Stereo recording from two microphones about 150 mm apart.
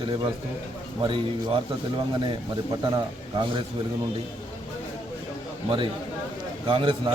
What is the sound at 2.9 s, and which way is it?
Speech, 30° right (ahead or behind).